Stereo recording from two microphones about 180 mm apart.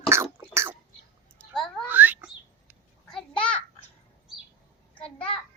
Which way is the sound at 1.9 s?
10° right (ahead or behind).